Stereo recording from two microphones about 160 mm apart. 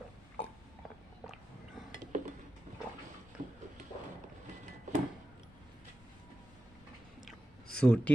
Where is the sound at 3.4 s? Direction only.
55° right (ahead or behind).